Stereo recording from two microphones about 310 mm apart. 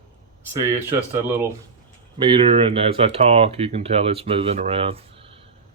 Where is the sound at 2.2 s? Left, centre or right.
Centre.